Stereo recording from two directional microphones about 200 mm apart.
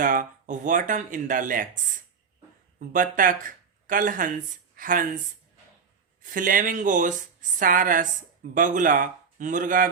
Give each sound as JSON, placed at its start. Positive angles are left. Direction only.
{"t": 0.0, "sound": "a woman's voice", "side_deg": -40}
{"t": 6.2, "sound": "a woman's voice", "side_deg": -40}